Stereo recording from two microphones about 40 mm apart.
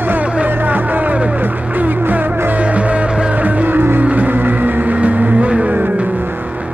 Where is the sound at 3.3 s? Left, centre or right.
Right.